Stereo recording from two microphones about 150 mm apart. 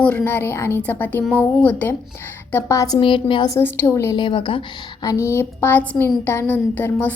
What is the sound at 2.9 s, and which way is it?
Speech, 35° left (ahead or behind).